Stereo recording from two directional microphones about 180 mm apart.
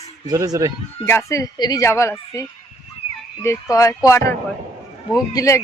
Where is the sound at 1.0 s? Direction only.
15° left (ahead or behind).